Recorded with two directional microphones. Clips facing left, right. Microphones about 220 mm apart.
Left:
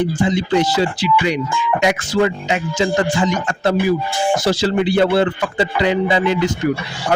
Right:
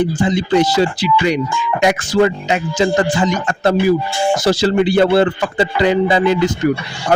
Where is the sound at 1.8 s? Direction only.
40° right (ahead or behind).